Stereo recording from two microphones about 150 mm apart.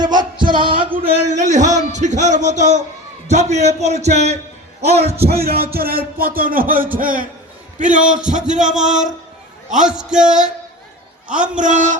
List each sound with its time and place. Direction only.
0.0 s music: 30° right (ahead or behind)
0.5 s a sound: 30° right (ahead or behind)
1.3 s music: 55° right (ahead or behind)
5.2 s a man's voice: 90° right; by 9.0 s 55° right (ahead or behind)
9.8 s a man's voice: 5° right (ahead or behind)
11.5 s speech: 55° right (ahead or behind)